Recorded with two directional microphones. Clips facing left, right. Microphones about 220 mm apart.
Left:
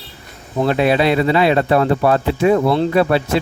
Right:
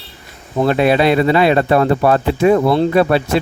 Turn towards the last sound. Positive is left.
turn(degrees=-45)  # may be behind; listen again after turning